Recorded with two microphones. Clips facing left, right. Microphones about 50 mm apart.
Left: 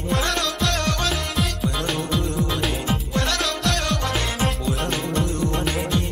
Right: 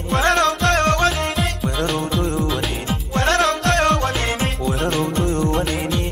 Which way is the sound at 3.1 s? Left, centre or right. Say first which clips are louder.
Right 9 dB; right.